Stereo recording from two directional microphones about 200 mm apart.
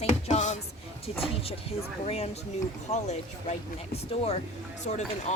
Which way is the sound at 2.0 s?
30° left (ahead or behind).